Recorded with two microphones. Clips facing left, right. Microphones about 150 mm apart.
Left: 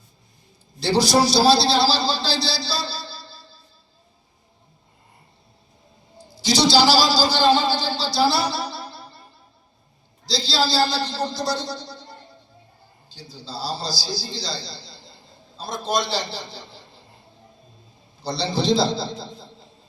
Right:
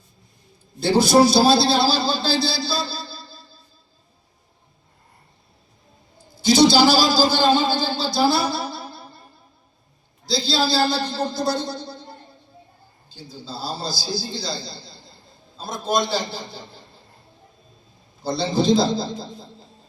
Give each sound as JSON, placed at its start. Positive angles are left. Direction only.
{"t": 0.8, "sound": "a man's voice", "side_deg": -55}
{"t": 6.3, "sound": "a man's voice", "side_deg": -55}
{"t": 10.2, "sound": "a man's voice", "side_deg": -55}
{"t": 13.1, "sound": "a man's voice", "side_deg": -50}
{"t": 18.2, "sound": "a man's voice", "side_deg": -50}